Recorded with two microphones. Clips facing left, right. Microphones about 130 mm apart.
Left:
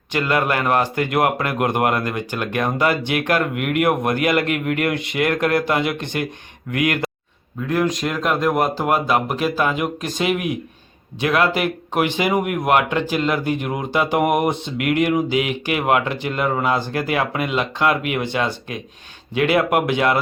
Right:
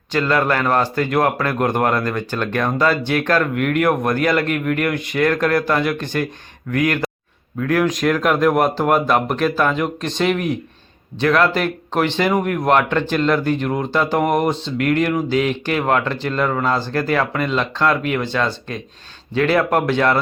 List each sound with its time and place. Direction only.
0.1 s a man's voice: 15° left (ahead or behind)
7.7 s speech: centre (ahead or behind)